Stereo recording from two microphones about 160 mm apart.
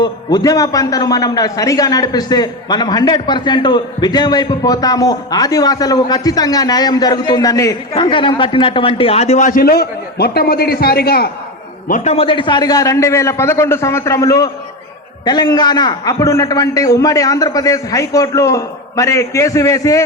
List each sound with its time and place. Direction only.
0.0 s a man's voice: 25° left (ahead or behind); by 11.3 s 75° left (ahead or behind)
11.9 s a man's voice: 55° left (ahead or behind)
12.1 s a man's voice: 35° left (ahead or behind)